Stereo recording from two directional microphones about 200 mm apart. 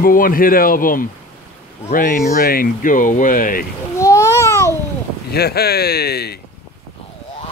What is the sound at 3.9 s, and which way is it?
Babbling, 15° left (ahead or behind).